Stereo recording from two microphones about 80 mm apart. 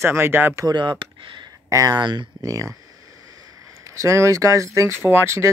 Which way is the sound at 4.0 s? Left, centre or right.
Right.